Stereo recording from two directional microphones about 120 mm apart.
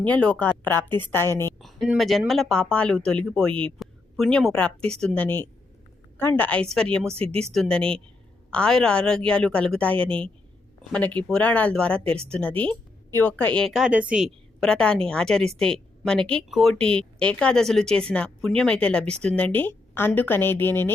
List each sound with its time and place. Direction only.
0.0 s a woman's voice: 10° left (ahead or behind)
1.5 s a sound: centre (ahead or behind)
2.0 s speech: centre (ahead or behind)
13.7 s a woman's voice: 5° right (ahead or behind); by 20.9 s 20° left (ahead or behind)